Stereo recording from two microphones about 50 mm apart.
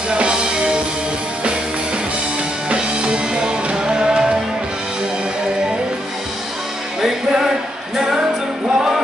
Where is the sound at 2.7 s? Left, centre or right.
Centre.